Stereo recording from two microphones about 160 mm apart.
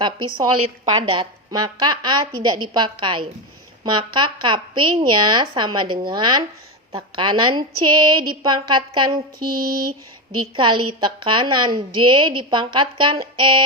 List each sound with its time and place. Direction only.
0.0 s a woman's voice: 30° right (ahead or behind)
9.4 s mantra: 65° right (ahead or behind)
10.4 s a woman's voice: 30° right (ahead or behind)